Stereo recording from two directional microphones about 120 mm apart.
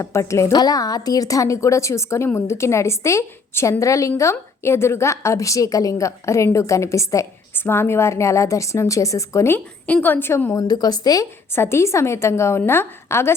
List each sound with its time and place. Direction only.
0.0 s a woman's voice: 25° left (ahead or behind)
11.5 s a woman's voice: 20° left (ahead or behind)